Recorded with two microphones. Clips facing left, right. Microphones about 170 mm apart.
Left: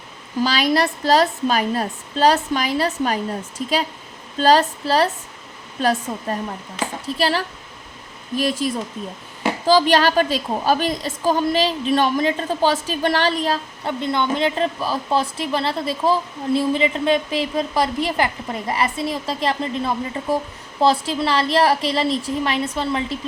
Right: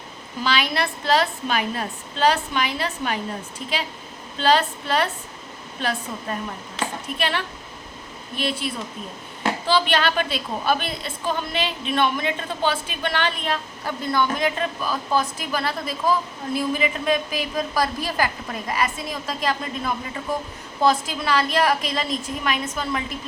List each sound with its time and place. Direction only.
0.4 s a woman's voice: 40° left (ahead or behind)
4.4 s a woman's voice: 40° left (ahead or behind)
13.8 s a woman's voice: 20° left (ahead or behind)